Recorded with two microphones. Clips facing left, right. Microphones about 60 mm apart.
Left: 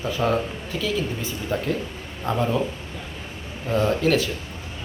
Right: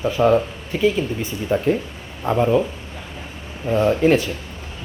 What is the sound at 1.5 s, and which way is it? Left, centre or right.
Speech, right.